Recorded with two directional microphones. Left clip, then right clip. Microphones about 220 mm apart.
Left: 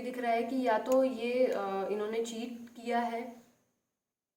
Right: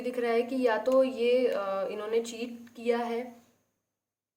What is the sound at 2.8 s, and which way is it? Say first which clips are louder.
Speech: right 3 dB; 45° right (ahead or behind).